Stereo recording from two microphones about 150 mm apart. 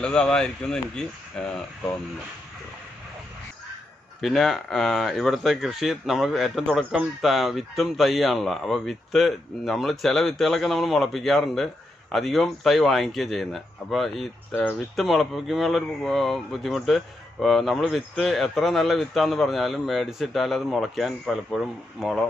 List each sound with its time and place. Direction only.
0.0 s speech: 5° left (ahead or behind)
4.2 s speech: centre (ahead or behind)